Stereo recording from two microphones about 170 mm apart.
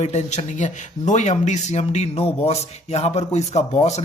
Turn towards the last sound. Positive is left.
turn(degrees=40)  # may be behind; listen again after turning